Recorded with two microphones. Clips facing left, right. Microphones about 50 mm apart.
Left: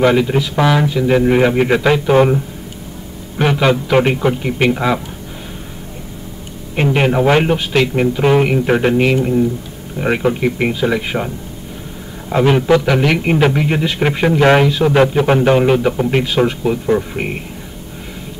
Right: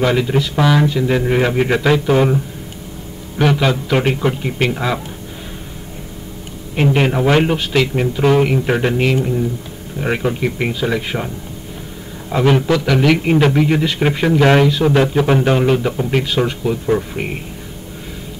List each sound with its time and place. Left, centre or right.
0.0 s a man's voice: centre
6.7 s a man's voice: centre
7.5 s speech: left
7.9 s a man's voice: centre
12.4 s a man's voice: centre